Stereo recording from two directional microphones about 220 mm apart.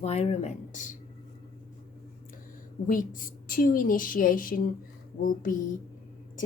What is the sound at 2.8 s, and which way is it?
Speech, 40° left (ahead or behind).